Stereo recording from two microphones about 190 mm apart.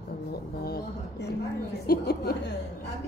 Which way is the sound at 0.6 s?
60° left (ahead or behind).